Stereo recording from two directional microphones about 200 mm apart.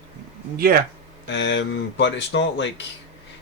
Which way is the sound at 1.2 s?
65° left (ahead or behind).